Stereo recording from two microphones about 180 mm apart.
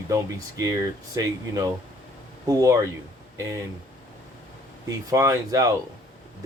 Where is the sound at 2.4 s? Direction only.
20° right (ahead or behind).